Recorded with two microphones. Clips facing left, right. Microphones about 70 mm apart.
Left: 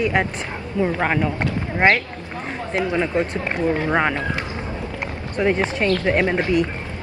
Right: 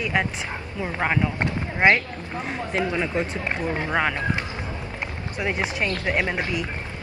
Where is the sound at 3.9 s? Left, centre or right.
Centre.